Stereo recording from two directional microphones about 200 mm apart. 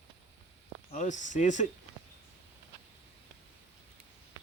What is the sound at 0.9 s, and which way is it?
Speech, 35° left (ahead or behind).